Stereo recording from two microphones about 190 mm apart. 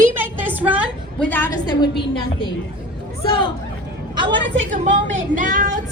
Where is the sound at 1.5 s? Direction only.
25° left (ahead or behind).